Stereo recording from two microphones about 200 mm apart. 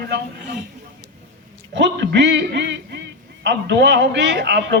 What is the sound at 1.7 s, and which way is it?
A man's voice, 60° right (ahead or behind).